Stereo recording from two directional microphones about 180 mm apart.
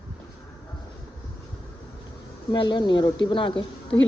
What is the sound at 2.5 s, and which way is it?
A woman's voice, 25° left (ahead or behind).